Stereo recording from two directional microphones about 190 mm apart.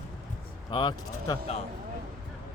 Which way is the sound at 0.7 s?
25° left (ahead or behind).